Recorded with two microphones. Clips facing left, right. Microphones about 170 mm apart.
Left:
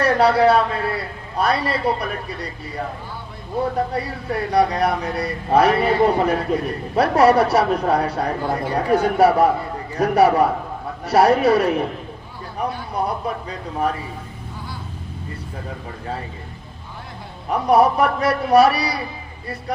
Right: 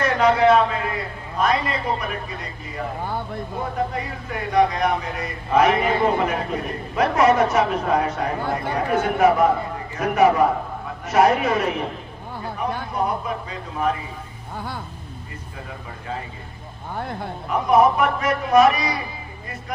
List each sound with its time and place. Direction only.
0.0 s a man's voice: 35° left (ahead or behind)
3.9 s speech: 35° left (ahead or behind)
13.2 s speech: 35° left (ahead or behind)
16.9 s speech: 55° right (ahead or behind)
17.7 s speech: 35° left (ahead or behind)